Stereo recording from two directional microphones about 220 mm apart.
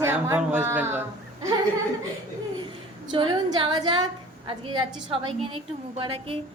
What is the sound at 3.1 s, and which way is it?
A woman's voice, 20° right (ahead or behind).